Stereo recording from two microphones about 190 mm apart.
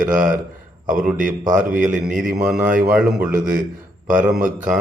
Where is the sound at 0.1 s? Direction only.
45° right (ahead or behind).